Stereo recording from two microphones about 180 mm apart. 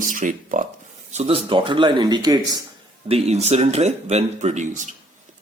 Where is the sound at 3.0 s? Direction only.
35° right (ahead or behind).